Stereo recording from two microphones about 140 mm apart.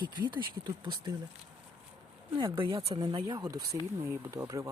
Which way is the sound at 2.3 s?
35° right (ahead or behind).